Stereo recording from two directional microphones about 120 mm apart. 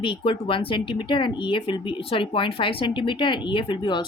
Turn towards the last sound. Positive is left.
turn(degrees=40)  # may be behind; listen again after turning